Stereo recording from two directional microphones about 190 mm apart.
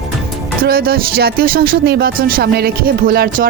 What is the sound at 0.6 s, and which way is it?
Speech, 50° right (ahead or behind).